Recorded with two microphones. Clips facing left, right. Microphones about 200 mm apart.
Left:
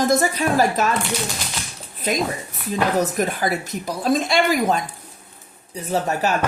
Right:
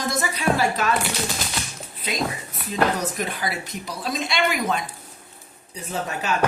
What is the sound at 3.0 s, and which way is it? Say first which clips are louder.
A woman's voice: left 6 dB; 45° left (ahead or behind).